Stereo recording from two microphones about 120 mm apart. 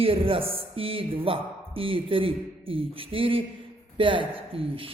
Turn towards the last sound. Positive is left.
turn(degrees=-50)  # may be behind; listen again after turning